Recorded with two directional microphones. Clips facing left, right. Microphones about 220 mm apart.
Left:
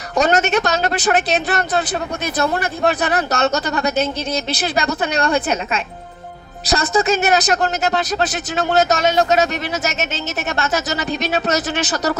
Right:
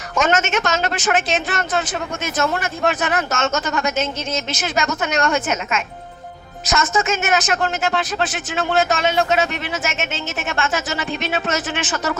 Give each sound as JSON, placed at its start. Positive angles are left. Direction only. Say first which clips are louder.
{"t": 0.2, "sound": "speech", "louder": "left 3 dB", "side_deg": 35}